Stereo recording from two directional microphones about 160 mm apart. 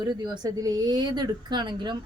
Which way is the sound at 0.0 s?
25° right (ahead or behind).